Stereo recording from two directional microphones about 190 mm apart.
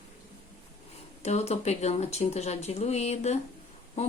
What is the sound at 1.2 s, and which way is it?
Speech, 35° left (ahead or behind).